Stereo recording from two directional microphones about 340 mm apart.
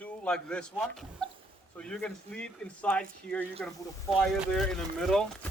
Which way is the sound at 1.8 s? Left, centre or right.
Centre.